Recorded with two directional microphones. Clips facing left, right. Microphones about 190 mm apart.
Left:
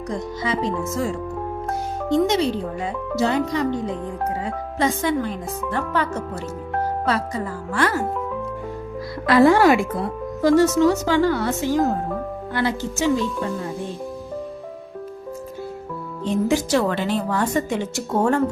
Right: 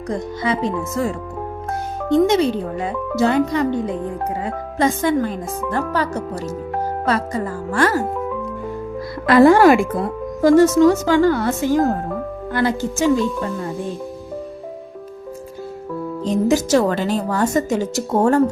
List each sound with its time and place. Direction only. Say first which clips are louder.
0.4 s speech: right 4 dB; 60° right (ahead or behind)
2.0 s speech: right 4 dB; 55° right (ahead or behind)
4.8 s a woman's voice: right 4 dB; 50° right (ahead or behind)
5.7 s a woman's voice: right 2 dB; 40° right (ahead or behind)
9.2 s a woman's voice: right 4 dB; 50° right (ahead or behind)
16.2 s a woman's voice: right 3 dB; 40° right (ahead or behind)